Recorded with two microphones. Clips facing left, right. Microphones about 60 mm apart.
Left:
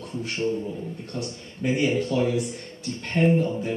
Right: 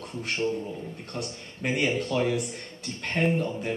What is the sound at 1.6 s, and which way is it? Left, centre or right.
Speech, right.